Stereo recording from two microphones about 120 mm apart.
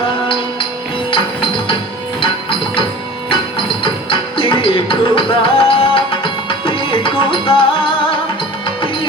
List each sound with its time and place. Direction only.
1.1 s music: 45° left (ahead or behind)
3.8 s music: 45° left (ahead or behind)